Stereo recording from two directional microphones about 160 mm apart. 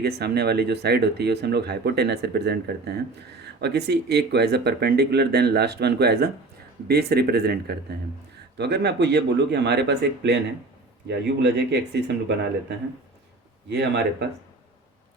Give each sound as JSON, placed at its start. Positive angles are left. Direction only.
{"t": 0.0, "sound": "speech", "side_deg": -90}
{"t": 11.4, "sound": "speech", "side_deg": -90}
{"t": 13.7, "sound": "speech", "side_deg": -90}